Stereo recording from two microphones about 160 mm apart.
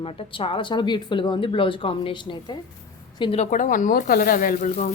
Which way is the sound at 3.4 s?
55° left (ahead or behind).